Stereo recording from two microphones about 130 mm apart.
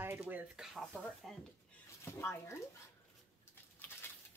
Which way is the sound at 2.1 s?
20° left (ahead or behind).